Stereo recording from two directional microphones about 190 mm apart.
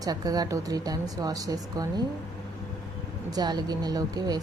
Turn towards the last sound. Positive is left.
turn(degrees=-20)  # may be behind; listen again after turning